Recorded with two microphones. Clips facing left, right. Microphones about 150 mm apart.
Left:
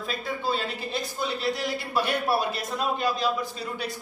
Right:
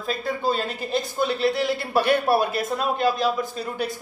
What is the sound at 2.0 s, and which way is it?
A man's voice, 60° right (ahead or behind).